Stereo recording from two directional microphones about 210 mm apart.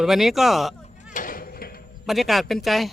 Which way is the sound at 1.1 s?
40° left (ahead or behind).